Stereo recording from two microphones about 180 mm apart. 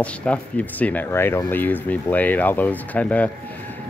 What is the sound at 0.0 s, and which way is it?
Speech, 5° left (ahead or behind).